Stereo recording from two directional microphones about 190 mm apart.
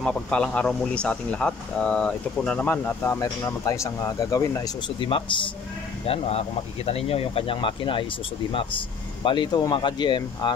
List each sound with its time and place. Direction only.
0.0 s speech: 5° left (ahead or behind); by 10.5 s 25° left (ahead or behind)